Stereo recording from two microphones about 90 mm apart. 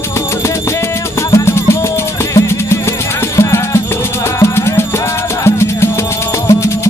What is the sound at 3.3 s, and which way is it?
Music, 35° left (ahead or behind).